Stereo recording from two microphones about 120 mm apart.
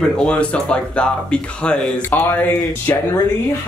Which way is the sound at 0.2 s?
10° left (ahead or behind).